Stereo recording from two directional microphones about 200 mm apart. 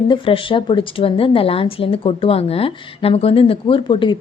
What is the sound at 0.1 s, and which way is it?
A woman's voice, 25° left (ahead or behind).